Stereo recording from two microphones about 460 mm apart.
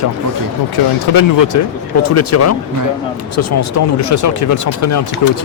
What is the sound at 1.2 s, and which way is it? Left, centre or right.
Speech, left.